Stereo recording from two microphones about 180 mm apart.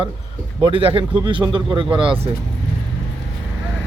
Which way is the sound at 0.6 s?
30° right (ahead or behind).